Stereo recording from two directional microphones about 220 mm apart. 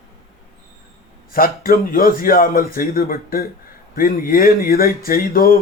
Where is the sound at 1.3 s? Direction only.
40° left (ahead or behind).